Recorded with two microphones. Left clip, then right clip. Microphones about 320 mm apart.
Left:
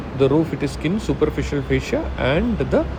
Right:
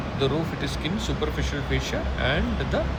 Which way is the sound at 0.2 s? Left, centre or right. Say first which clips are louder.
Left 9 dB; centre.